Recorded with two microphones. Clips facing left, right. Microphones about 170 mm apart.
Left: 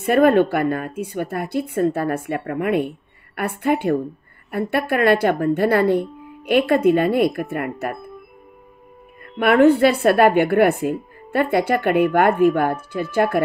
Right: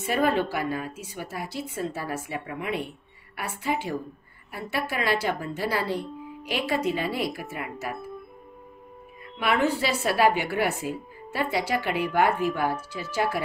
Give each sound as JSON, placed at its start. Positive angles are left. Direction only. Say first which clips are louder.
{"t": 0.0, "sound": "speech", "louder": "left 10 dB", "side_deg": 55}
{"t": 9.4, "sound": "speech", "louder": "left 11 dB", "side_deg": 55}